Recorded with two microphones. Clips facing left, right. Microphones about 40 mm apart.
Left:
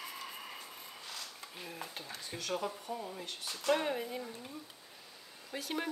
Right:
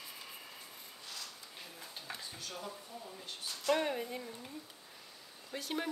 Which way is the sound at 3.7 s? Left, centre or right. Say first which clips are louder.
Left 1 dB; centre.